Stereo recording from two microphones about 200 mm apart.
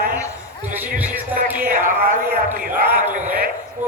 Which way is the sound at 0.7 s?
10° right (ahead or behind).